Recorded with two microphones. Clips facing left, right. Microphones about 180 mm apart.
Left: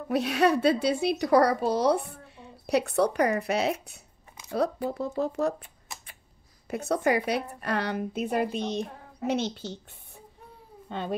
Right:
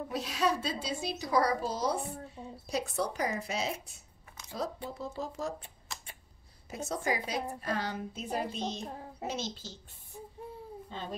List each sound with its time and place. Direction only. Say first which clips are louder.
0.1 s a woman's voice: left 9 dB; 65° left (ahead or behind)
6.7 s a woman's voice: left 8 dB; 65° left (ahead or behind)
10.9 s speech: left 10 dB; 60° left (ahead or behind)